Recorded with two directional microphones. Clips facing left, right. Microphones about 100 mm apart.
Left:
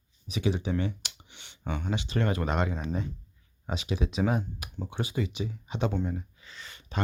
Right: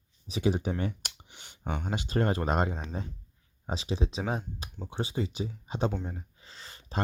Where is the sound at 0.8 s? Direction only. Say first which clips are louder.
Left 1 dB; 45° right (ahead or behind).